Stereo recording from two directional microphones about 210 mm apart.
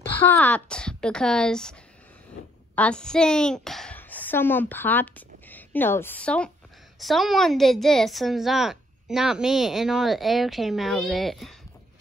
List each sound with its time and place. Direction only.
0.3 s a woman's voice: 5° left (ahead or behind)